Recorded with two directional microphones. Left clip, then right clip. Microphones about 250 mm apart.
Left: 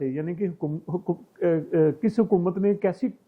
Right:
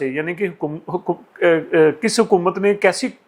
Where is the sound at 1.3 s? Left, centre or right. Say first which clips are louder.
Right 8 dB; centre.